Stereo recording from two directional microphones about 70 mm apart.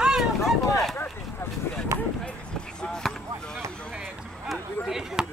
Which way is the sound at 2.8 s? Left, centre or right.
Centre.